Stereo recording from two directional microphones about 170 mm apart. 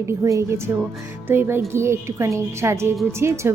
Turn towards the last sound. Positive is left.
turn(degrees=-15)  # may be behind; listen again after turning